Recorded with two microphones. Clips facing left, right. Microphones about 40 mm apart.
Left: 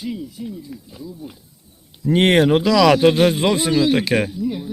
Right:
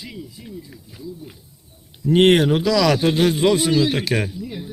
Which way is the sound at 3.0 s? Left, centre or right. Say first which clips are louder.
Left 3 dB; left.